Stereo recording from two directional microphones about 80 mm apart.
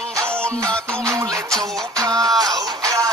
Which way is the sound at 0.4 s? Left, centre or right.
Centre.